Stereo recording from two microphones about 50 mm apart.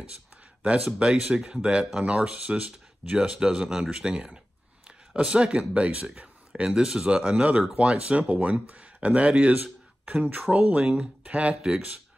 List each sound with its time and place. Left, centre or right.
0.9 s speech: centre
8.2 s speech: right